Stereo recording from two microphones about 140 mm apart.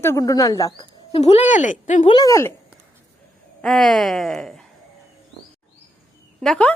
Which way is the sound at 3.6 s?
Centre (ahead or behind).